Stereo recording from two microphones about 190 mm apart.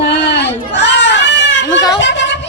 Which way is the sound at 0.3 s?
65° left (ahead or behind).